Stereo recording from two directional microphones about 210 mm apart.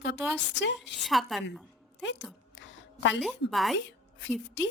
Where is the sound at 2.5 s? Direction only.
60° left (ahead or behind).